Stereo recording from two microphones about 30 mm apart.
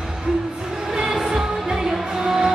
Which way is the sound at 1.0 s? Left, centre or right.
Centre.